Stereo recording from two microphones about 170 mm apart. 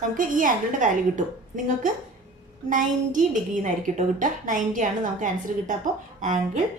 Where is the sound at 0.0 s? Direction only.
50° right (ahead or behind).